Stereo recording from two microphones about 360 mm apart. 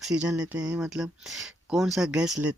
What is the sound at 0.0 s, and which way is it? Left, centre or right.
Speech, centre.